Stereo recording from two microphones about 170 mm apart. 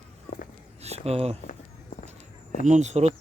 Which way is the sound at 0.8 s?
35° right (ahead or behind).